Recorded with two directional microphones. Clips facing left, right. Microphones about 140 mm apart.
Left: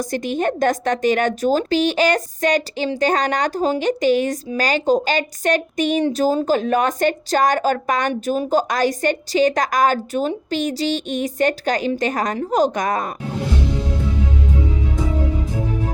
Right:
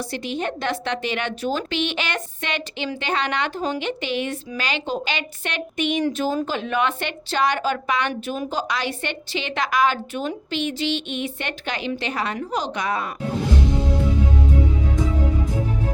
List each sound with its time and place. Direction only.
0.0 s a woman's voice: 45° left (ahead or behind)